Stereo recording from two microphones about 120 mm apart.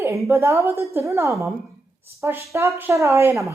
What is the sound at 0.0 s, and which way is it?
Speech, 25° right (ahead or behind).